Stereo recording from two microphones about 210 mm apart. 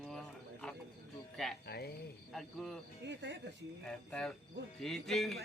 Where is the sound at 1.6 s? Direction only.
50° left (ahead or behind).